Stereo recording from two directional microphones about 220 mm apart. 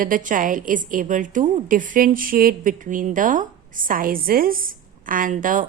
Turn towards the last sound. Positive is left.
turn(degrees=-35)  # may be behind; listen again after turning